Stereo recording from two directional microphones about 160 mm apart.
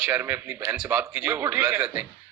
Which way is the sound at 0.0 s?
10° right (ahead or behind).